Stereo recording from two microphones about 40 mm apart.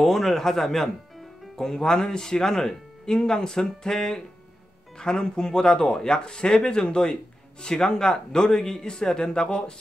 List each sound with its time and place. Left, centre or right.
0.0 s speech: centre